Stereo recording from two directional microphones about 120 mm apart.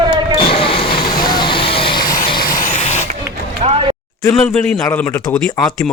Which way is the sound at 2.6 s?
70° left (ahead or behind).